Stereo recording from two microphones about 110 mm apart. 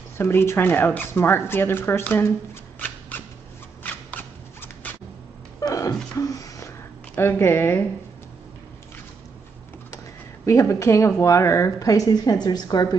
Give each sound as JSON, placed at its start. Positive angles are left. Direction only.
{"t": 0.2, "sound": "speech", "side_deg": 20}
{"t": 2.8, "sound": "cat", "side_deg": 15}
{"t": 3.8, "sound": "a sound", "side_deg": 15}
{"t": 5.6, "sound": "a sound", "side_deg": 35}
{"t": 7.2, "sound": "speech", "side_deg": 20}
{"t": 10.4, "sound": "a woman's voice", "side_deg": 30}